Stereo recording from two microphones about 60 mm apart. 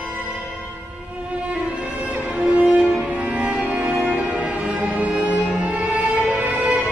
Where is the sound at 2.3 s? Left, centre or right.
Centre.